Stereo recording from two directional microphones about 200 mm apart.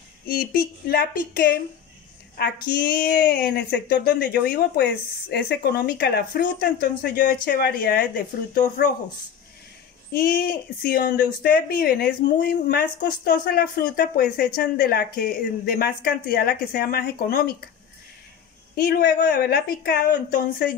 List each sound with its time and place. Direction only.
0.3 s speech: 50° left (ahead or behind)
3.0 s speech: 45° left (ahead or behind)
10.1 s speech: 45° left (ahead or behind)
18.8 s speech: 45° left (ahead or behind)